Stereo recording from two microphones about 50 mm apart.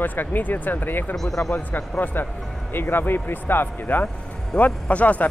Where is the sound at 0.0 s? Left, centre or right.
Left.